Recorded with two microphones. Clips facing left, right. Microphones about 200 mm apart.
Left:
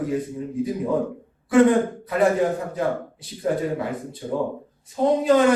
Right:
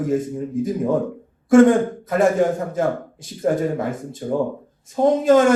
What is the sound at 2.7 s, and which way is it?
A man's voice, 45° right (ahead or behind).